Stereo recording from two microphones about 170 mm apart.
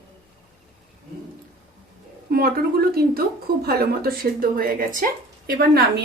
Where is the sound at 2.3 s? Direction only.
65° right (ahead or behind).